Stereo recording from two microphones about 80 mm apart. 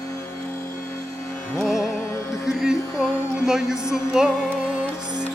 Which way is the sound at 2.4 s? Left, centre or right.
Centre.